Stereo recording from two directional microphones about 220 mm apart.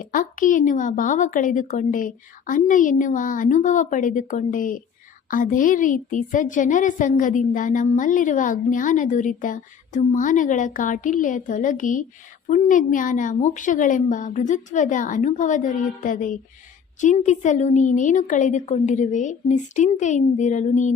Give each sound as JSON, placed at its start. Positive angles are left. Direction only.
{"t": 0.0, "sound": "a woman's voice", "side_deg": 35}